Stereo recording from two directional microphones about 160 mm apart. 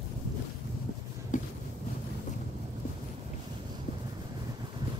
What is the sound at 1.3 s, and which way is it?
Vehicle, 50° left (ahead or behind).